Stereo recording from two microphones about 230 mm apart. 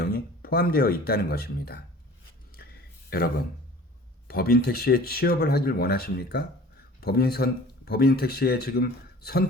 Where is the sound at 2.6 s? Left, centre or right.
Left.